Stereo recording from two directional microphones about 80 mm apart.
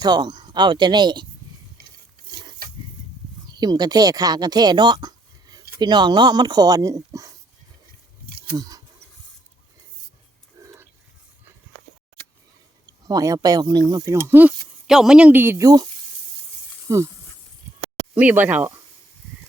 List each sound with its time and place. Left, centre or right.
0.0 s speech: right
2.3 s a sound: right
3.4 s speech: right
8.5 s a sound: right
10.6 s a sound: right
13.1 s speech: right
14.3 s speech: right
14.8 s speech: centre
15.3 s speech: right
15.5 s speech: right
16.9 s speech: right
18.1 s speech: right